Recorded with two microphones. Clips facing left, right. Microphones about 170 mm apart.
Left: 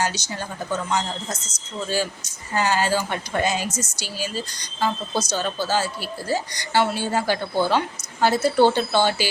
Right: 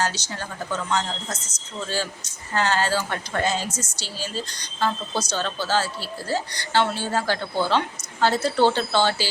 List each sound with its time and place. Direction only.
0.0 s a woman's voice: 15° left (ahead or behind)
2.5 s a woman's voice: 10° left (ahead or behind)